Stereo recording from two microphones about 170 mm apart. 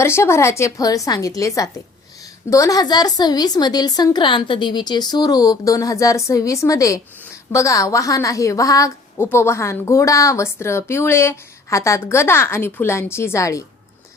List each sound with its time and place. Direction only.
0.0 s a woman's voice: 15° left (ahead or behind)